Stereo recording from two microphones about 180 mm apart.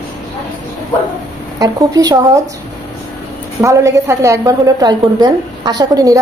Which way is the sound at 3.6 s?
15° right (ahead or behind).